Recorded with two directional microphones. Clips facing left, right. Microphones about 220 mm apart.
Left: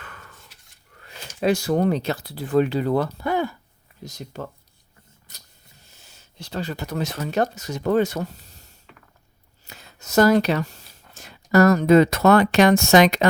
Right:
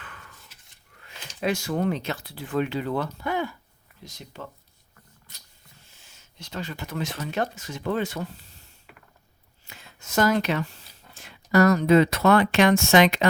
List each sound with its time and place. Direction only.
0.0 s a sound: 45° left (ahead or behind)
1.4 s speech: 35° left (ahead or behind)
5.8 s speech: 40° left (ahead or behind)